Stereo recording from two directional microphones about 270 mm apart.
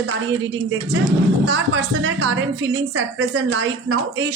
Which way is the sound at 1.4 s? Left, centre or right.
Right.